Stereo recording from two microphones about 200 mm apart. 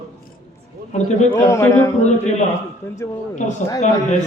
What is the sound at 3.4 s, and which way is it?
Speech, 35° left (ahead or behind).